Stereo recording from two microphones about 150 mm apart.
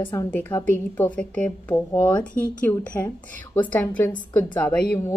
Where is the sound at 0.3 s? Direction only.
15° left (ahead or behind).